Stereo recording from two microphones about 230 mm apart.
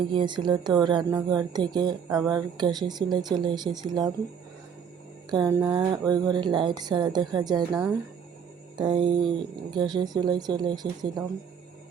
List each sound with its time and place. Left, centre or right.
0.1 s speech: right
5.3 s speech: centre
7.7 s speech: centre
8.8 s speech: right